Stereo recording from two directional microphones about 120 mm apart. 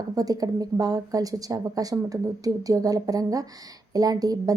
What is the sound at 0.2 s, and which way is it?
A woman's voice, 30° right (ahead or behind).